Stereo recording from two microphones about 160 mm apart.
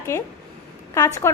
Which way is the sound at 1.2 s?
15° left (ahead or behind).